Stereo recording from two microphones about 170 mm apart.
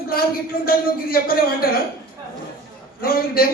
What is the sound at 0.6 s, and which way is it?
Speech, 60° left (ahead or behind).